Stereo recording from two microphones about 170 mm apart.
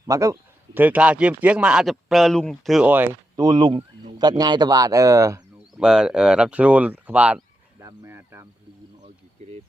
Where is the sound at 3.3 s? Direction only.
25° right (ahead or behind).